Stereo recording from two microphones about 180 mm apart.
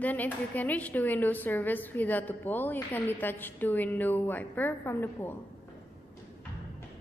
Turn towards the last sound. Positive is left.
turn(degrees=10)  # may be behind; listen again after turning